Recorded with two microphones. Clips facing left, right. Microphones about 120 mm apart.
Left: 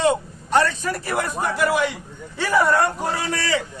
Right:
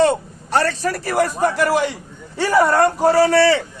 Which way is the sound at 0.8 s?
40° right (ahead or behind).